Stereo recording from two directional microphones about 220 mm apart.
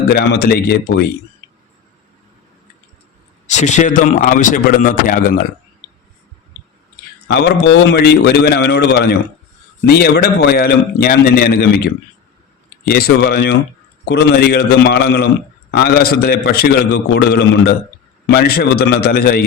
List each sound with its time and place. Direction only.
0.1 s a man's voice: 45° left (ahead or behind)
3.4 s a man's voice: 30° left (ahead or behind)
7.3 s a man's voice: 50° left (ahead or behind)